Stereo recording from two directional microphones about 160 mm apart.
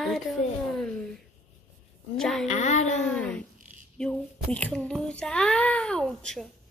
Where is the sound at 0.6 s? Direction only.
5° left (ahead or behind).